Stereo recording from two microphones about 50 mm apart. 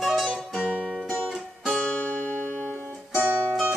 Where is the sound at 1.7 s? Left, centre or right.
Left.